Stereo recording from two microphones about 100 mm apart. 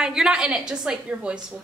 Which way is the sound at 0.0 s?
5° right (ahead or behind).